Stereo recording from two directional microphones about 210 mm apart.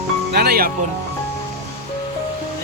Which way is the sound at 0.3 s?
45° right (ahead or behind).